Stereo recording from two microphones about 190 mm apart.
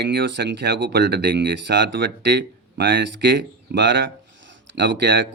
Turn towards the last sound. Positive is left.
turn(degrees=-70)  # may be behind; listen again after turning